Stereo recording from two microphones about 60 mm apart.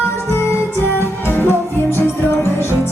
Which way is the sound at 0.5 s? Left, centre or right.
Left.